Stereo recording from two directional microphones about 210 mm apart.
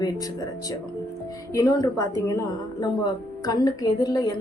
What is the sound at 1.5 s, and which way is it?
A woman's voice, 15° left (ahead or behind).